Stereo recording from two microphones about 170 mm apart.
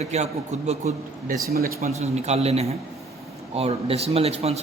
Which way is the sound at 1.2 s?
60° right (ahead or behind).